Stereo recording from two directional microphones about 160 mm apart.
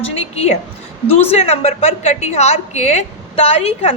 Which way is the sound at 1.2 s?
40° left (ahead or behind).